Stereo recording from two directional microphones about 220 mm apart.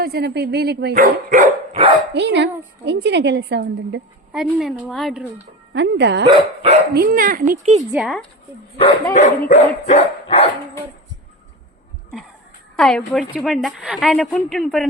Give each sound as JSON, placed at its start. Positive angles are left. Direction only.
{"t": 0.0, "sound": "speech", "side_deg": -45}
{"t": 2.1, "sound": "a woman's voice", "side_deg": -50}
{"t": 4.3, "sound": "a woman's voice", "side_deg": -5}
{"t": 5.7, "sound": "a woman's voice", "side_deg": -50}
{"t": 6.2, "sound": "speech", "side_deg": -25}
{"t": 6.9, "sound": "a child's voice", "side_deg": -40}
{"t": 7.9, "sound": "a woman's voice", "side_deg": 0}
{"t": 9.1, "sound": "speech", "side_deg": 30}
{"t": 12.7, "sound": "a woman's voice", "side_deg": 0}